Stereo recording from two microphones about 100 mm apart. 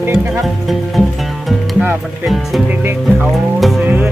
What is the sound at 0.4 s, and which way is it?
Speech, centre (ahead or behind).